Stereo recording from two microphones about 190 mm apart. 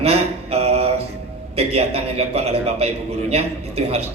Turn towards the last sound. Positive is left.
turn(degrees=-30)  # may be behind; listen again after turning